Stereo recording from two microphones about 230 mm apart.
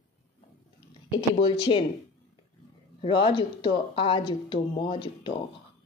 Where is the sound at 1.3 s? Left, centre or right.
Left.